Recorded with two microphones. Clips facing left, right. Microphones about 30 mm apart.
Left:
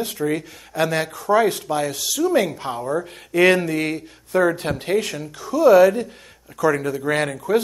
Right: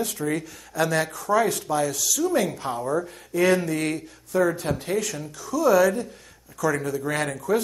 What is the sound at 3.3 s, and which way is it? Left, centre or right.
Speech, left.